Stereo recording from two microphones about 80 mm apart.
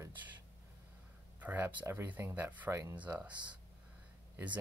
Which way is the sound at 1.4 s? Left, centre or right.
Right.